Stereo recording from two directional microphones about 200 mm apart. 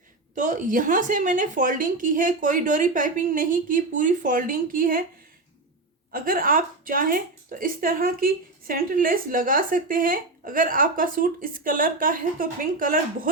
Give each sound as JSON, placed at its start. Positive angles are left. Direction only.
{"t": 0.3, "sound": "a woman's voice", "side_deg": -40}
{"t": 6.1, "sound": "a woman's voice", "side_deg": -45}